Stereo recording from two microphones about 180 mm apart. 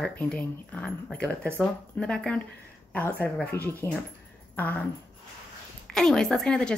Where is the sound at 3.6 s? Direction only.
15° right (ahead or behind).